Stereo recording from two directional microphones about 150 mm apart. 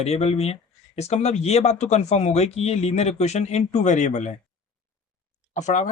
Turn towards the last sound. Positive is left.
turn(degrees=50)  # may be behind; listen again after turning